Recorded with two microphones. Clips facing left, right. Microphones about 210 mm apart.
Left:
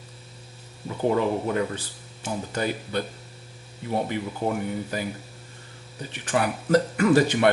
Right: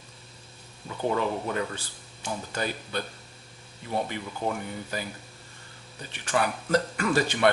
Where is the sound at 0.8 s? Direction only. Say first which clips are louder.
Left 4 dB; 20° left (ahead or behind).